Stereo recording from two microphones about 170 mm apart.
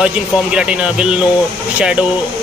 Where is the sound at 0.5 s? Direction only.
5° right (ahead or behind).